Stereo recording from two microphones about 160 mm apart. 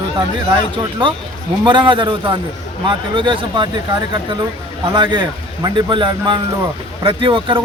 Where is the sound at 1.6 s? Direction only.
30° right (ahead or behind).